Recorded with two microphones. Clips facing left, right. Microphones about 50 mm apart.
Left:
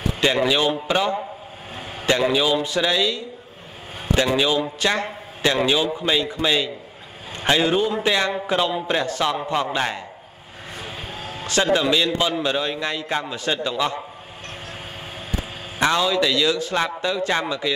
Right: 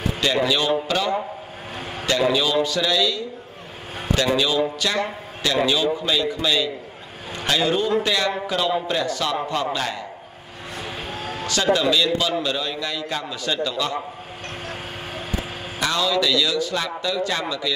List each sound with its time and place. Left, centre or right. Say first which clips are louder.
0.2 s a man's voice: left 2 dB; left
2.2 s a man's voice: even; centre
4.4 s a man's voice: even; left
10.9 s vehicle: right 4 dB; right
11.4 s a man's voice: left 1 dB; left
15.8 s a man's voice: left 2 dB; left